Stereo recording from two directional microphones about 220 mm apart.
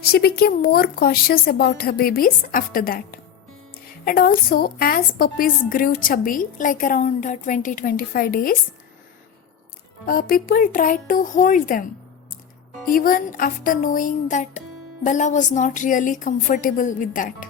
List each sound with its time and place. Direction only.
0.0 s a woman's voice: 45° left (ahead or behind)
10.1 s a woman's voice: 40° left (ahead or behind)
12.9 s a woman's voice: 40° left (ahead or behind)